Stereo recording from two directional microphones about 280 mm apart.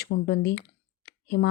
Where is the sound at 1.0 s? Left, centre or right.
Left.